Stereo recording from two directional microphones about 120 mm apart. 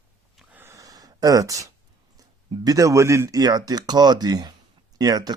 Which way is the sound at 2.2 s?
30° right (ahead or behind).